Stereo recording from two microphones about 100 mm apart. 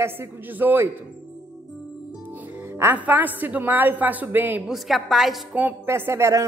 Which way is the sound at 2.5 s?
25° right (ahead or behind).